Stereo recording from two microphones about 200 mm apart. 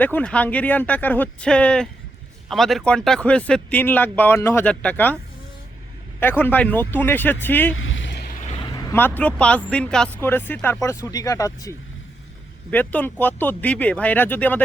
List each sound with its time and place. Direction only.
0.0 s speech: 5° left (ahead or behind)
6.4 s speech: 10° left (ahead or behind)
7.7 s vehicle: 80° left; by 8.3 s 60° left (ahead or behind)
8.7 s speech: 10° left (ahead or behind)
12.7 s speech: 10° left (ahead or behind)